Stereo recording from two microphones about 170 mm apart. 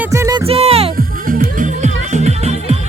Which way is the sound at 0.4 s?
35° right (ahead or behind).